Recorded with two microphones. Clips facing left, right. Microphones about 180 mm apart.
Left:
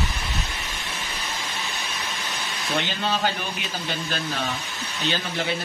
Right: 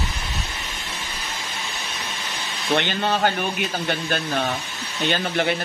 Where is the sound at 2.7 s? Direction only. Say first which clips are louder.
Right 3 dB; 60° right (ahead or behind).